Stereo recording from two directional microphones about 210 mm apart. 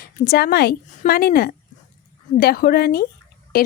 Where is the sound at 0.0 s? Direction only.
45° left (ahead or behind).